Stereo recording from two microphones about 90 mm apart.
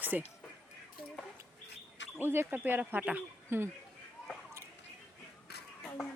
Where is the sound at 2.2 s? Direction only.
25° right (ahead or behind).